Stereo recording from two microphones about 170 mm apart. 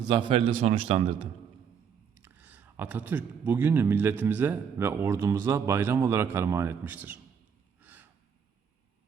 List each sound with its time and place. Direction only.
0.1 s a man's voice: 35° right (ahead or behind)
2.1 s speech: 10° right (ahead or behind)
7.8 s a sound: 10° right (ahead or behind)